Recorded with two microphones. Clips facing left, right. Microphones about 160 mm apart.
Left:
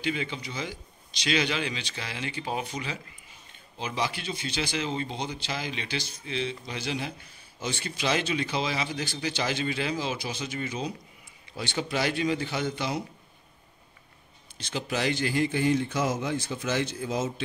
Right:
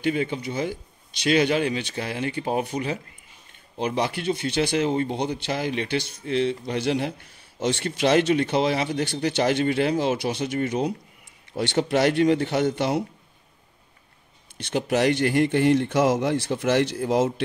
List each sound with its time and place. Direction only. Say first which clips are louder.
0.0 s a man's voice: right 7 dB; 50° right (ahead or behind); by 13.0 s 65° right (ahead or behind)
14.6 s speech: right 8 dB; 60° right (ahead or behind)